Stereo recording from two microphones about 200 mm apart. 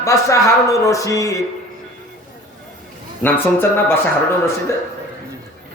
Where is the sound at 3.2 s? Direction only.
10° left (ahead or behind).